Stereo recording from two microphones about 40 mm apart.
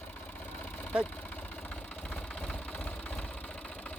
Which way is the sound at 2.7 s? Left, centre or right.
Left.